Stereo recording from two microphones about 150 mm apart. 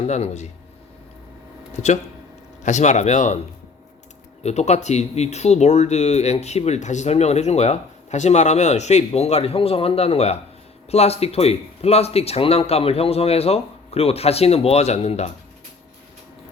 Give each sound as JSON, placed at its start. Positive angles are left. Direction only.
{"t": 0.1, "sound": "speech", "side_deg": 50}
{"t": 1.7, "sound": "speech", "side_deg": 50}
{"t": 4.4, "sound": "speech", "side_deg": 50}